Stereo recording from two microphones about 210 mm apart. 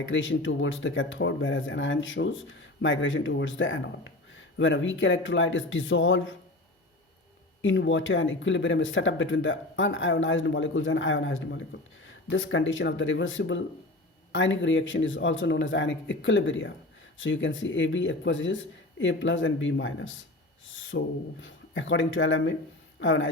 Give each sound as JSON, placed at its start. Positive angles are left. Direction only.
{"t": 0.0, "sound": "speech", "side_deg": 65}
{"t": 7.6, "sound": "speech", "side_deg": 65}